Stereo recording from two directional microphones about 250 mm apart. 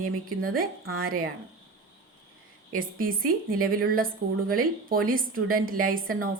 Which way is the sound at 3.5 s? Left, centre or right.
Right.